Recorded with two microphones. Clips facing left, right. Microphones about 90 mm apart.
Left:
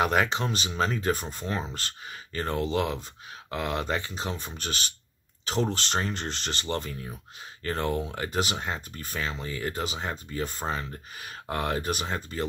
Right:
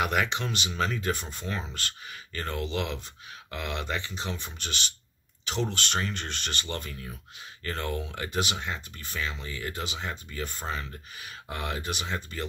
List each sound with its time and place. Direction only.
0.0 s speech: 35° left (ahead or behind)